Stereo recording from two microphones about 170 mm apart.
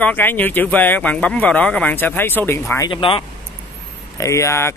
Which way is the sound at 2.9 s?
30° left (ahead or behind).